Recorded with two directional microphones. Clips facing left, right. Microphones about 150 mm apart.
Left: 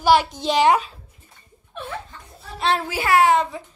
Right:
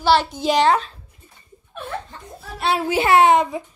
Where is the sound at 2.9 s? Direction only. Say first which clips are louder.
Right 4 dB; 25° right (ahead or behind).